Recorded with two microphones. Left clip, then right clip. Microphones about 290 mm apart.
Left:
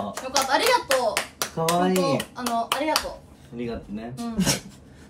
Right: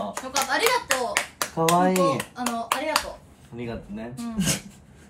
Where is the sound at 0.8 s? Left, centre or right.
Right.